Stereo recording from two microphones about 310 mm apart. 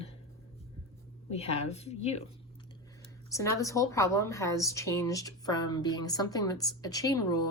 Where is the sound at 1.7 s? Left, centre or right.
Left.